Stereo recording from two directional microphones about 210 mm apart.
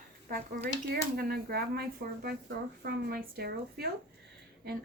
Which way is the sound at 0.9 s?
50° right (ahead or behind).